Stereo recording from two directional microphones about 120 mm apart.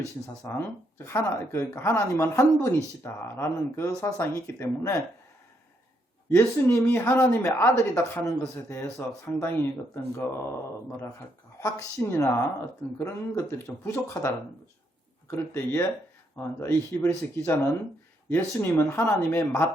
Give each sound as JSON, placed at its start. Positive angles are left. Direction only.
{"t": 0.4, "sound": "speech", "side_deg": 20}
{"t": 6.3, "sound": "speech", "side_deg": 20}
{"t": 11.6, "sound": "speech", "side_deg": 25}